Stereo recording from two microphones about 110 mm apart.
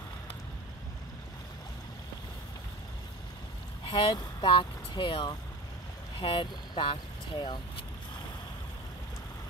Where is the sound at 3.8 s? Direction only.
45° left (ahead or behind).